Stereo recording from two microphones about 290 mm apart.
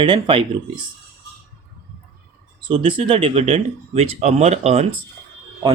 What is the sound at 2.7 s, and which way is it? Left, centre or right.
Speech, centre.